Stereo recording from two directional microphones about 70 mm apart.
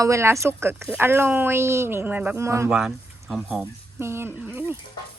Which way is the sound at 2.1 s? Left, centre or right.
Right.